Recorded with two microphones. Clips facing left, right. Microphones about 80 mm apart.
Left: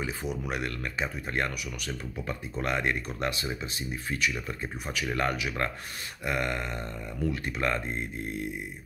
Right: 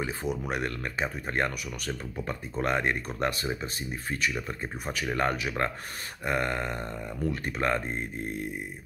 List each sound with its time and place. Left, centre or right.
0.5 s speech: right